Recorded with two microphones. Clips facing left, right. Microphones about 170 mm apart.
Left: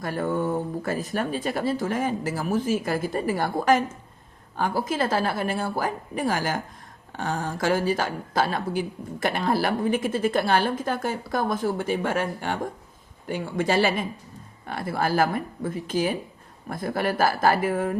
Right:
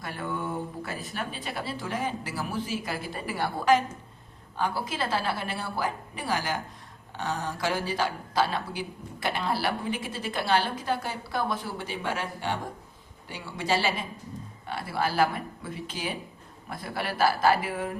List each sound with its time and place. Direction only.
0.0 s speech: 45° left (ahead or behind)